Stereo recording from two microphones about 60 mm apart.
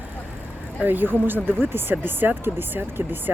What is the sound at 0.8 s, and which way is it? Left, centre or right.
Speech, right.